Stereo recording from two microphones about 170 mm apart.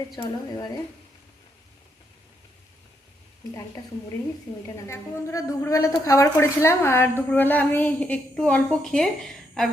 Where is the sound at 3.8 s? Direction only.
20° left (ahead or behind).